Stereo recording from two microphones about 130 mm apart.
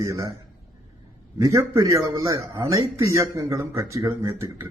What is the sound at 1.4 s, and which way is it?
Speech, 25° right (ahead or behind).